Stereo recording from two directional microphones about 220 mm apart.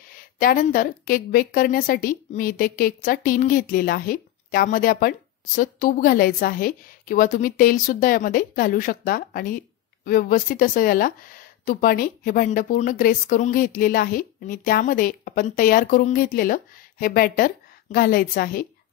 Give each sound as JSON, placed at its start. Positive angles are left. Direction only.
{"t": 0.1, "sound": "a woman's voice", "side_deg": 40}